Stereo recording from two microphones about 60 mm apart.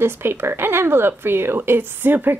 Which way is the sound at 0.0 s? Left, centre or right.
Right.